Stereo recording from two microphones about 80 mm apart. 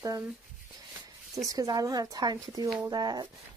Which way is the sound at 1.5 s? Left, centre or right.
Right.